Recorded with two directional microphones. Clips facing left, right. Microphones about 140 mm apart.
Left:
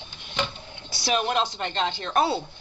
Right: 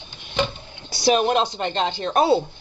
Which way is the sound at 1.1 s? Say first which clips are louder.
Right 6 dB; 25° right (ahead or behind).